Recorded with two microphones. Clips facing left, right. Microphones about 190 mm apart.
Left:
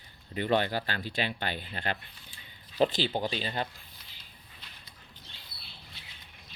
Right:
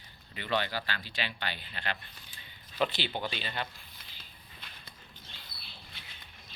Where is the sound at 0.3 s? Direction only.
45° left (ahead or behind).